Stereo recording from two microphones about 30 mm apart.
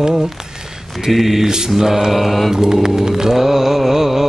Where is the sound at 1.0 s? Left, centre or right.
Centre.